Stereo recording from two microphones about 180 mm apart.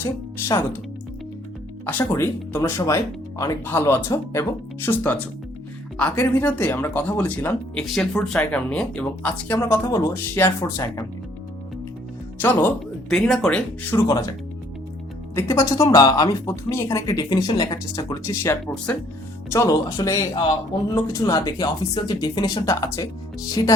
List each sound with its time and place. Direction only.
0.0 s speech: 15° left (ahead or behind)
1.9 s speech: 10° left (ahead or behind)
12.4 s speech: 10° left (ahead or behind)
13.9 s speech: 20° left (ahead or behind)
15.4 s speech: 15° left (ahead or behind)
18.6 s speech: 5° left (ahead or behind)
19.5 s speech: 15° left (ahead or behind)